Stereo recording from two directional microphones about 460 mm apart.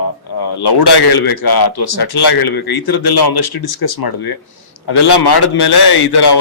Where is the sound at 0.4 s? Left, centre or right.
Left.